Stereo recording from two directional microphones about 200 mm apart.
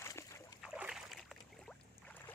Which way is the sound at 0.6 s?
5° right (ahead or behind).